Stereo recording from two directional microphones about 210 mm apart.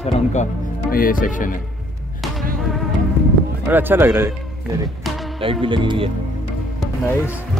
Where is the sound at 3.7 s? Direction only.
10° right (ahead or behind).